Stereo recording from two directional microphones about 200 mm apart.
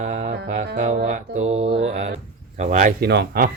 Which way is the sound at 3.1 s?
55° right (ahead or behind).